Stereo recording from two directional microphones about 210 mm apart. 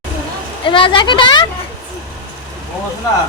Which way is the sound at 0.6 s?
25° left (ahead or behind).